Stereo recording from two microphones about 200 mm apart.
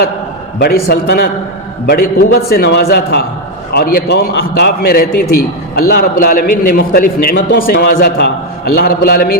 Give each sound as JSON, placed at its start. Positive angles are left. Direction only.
{"t": 0.6, "sound": "a man's voice", "side_deg": 55}